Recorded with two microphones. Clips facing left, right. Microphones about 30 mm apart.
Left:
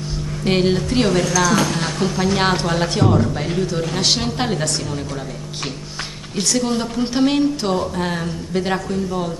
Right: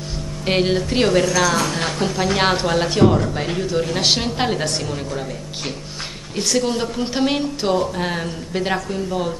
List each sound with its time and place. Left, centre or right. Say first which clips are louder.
0.5 s speech: left 1 dB; centre
1.2 s a woman's voice: even; right
2.2 s speech: right 1 dB; centre
6.5 s speech: even; centre